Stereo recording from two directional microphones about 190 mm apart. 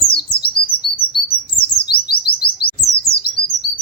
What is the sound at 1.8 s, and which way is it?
Bird, 55° left (ahead or behind).